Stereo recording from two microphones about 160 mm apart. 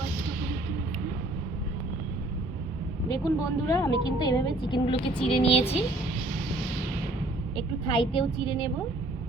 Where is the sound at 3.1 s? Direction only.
20° left (ahead or behind); by 5.6 s 40° left (ahead or behind).